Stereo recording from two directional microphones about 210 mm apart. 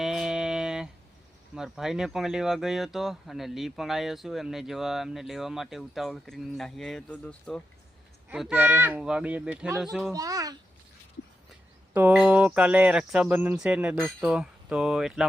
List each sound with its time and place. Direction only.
0.0 s a sound: centre (ahead or behind)
1.5 s speech: centre (ahead or behind)
10.1 s a child's voice: 15° right (ahead or behind)
11.9 s speech: 5° right (ahead or behind)